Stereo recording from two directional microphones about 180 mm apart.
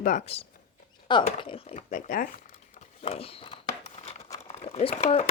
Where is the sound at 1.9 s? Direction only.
45° left (ahead or behind).